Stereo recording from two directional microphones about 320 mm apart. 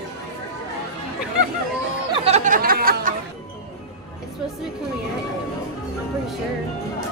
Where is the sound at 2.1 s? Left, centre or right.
Centre.